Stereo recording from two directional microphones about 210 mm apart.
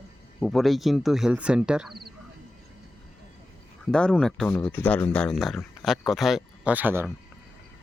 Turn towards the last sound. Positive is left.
turn(degrees=-10)  # may be behind; listen again after turning